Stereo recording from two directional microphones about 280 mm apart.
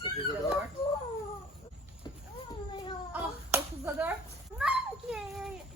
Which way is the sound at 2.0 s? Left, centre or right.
Centre.